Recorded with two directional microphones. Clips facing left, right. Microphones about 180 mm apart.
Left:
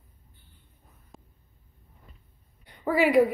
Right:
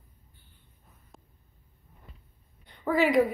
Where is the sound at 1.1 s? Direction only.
Centre (ahead or behind).